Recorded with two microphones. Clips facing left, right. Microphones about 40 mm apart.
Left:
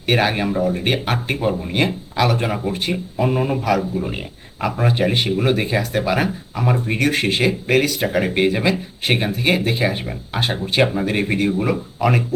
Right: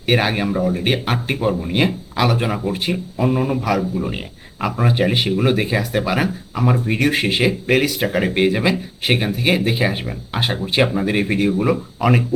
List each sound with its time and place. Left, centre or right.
0.0 s speech: centre